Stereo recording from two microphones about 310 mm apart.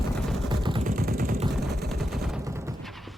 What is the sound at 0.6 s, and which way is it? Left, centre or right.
Vehicle, centre.